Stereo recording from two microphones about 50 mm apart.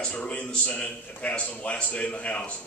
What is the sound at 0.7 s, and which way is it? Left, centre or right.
A man's voice, left.